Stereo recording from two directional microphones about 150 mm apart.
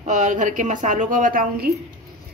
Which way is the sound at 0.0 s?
55° right (ahead or behind).